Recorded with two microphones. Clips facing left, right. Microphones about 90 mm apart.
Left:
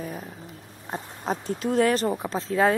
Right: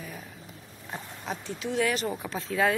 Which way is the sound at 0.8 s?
40° left (ahead or behind).